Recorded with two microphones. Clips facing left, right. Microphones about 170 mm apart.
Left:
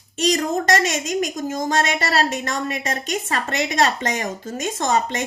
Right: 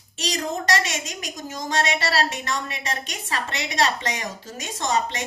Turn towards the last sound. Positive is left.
turn(degrees=50)  # may be behind; listen again after turning